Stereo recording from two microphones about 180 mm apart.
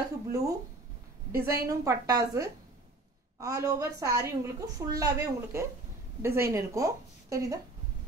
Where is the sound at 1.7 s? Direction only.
20° right (ahead or behind).